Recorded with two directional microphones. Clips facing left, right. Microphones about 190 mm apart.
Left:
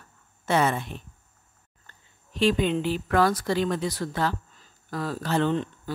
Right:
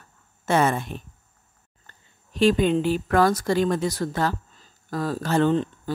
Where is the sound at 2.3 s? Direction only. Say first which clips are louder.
Right 4 dB; 45° right (ahead or behind).